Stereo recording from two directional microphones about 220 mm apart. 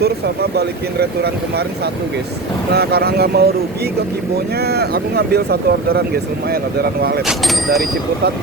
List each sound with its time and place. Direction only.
0.5 s speech: 45° right (ahead or behind)
2.7 s speech: 45° right (ahead or behind)
4.6 s speech: 45° right (ahead or behind)
7.3 s speech: centre (ahead or behind)